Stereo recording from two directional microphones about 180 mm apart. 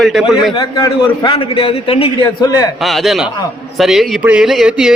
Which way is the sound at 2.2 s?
20° left (ahead or behind).